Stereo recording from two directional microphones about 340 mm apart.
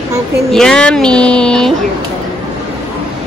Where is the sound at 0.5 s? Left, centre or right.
Centre.